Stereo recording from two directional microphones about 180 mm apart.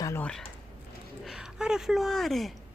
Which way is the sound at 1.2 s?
5° right (ahead or behind).